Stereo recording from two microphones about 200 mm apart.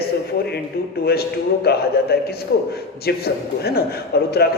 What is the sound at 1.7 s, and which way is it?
A man's voice, 55° left (ahead or behind).